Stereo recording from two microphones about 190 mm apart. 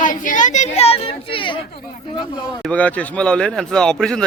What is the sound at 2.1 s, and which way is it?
Speech, 25° left (ahead or behind).